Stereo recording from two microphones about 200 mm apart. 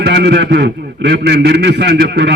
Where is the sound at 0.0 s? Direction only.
55° right (ahead or behind).